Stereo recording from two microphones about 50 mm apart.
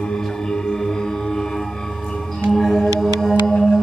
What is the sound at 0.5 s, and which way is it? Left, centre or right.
Music, centre.